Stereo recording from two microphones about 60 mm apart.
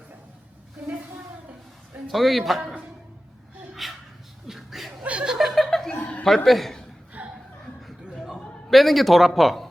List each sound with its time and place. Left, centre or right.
2.0 s speech: centre
3.8 s a sound: centre
4.4 s chuckle: centre
4.9 s chuckle: centre
5.3 s chuckle: centre
6.0 s chuckle: left
6.2 s a man's voice: centre
7.2 s chuckle: right
7.8 s chuckle: centre
8.7 s speech: centre